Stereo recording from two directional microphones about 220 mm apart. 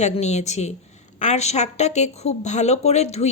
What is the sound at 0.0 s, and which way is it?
A woman's voice, 30° left (ahead or behind).